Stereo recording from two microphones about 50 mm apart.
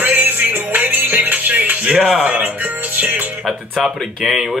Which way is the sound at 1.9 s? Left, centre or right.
Centre.